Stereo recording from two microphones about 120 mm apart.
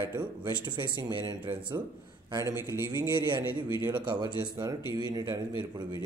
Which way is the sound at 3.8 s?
40° right (ahead or behind).